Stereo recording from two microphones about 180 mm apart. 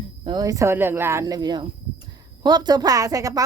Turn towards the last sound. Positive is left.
turn(degrees=-20)  # may be behind; listen again after turning